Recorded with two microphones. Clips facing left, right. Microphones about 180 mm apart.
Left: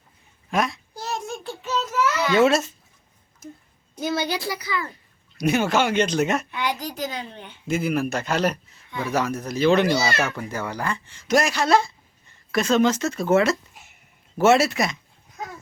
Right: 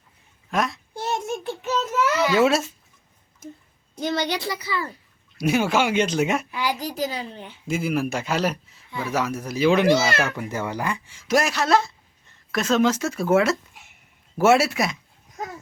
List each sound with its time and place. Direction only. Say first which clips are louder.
0.5 s speech: left 1 dB; centre (ahead or behind)
0.9 s child singing: right 5 dB; 25° right (ahead or behind)
2.2 s speech: left 2 dB; 5° right (ahead or behind)
4.0 s speech: even; 5° left (ahead or behind)
10.2 s speech: right 1 dB; 15° right (ahead or behind)